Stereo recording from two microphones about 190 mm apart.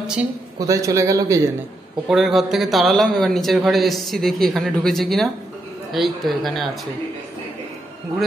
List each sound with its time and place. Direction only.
0.0 s a woman's voice: 5° right (ahead or behind)
0.6 s a man's voice: 15° right (ahead or behind)
2.0 s a man's voice: centre (ahead or behind)